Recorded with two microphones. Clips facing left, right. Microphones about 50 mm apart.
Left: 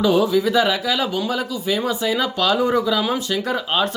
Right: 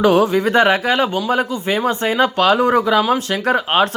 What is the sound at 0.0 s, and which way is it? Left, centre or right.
A man's voice, right.